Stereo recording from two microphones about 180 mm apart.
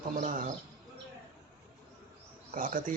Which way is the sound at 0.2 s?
50° right (ahead or behind).